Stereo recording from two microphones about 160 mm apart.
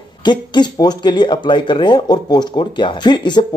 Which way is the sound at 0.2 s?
30° left (ahead or behind).